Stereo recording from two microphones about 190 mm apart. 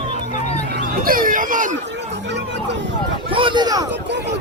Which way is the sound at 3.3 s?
25° right (ahead or behind).